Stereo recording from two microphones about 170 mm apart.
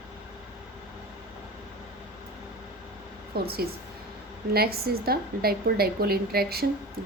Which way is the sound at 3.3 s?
65° right (ahead or behind).